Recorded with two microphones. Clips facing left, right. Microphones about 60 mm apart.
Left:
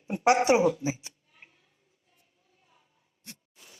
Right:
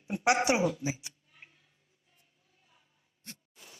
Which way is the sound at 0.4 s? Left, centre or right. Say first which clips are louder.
Left 5 dB; left.